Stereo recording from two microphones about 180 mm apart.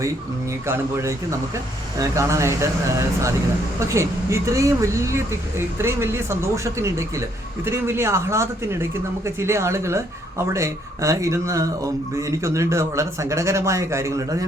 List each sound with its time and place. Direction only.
0.7 s speech: 15° right (ahead or behind)